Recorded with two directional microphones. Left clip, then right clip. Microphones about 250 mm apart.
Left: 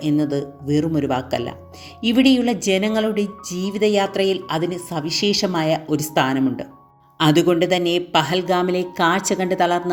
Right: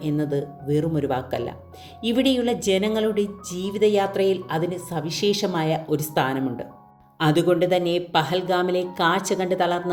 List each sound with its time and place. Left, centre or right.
0.1 s speech: left